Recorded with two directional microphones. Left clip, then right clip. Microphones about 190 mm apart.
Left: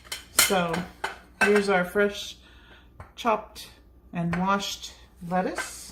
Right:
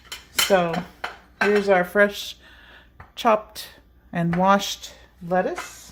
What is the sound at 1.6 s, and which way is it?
Speech, 55° right (ahead or behind).